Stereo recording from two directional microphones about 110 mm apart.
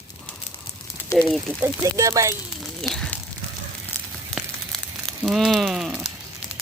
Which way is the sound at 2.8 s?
5° left (ahead or behind).